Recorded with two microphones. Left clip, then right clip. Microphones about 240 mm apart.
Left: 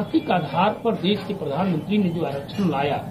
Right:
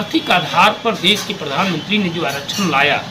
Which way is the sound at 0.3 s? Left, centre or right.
Centre.